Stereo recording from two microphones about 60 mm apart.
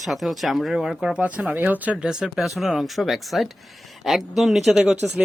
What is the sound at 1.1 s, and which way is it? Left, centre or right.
Speech, right.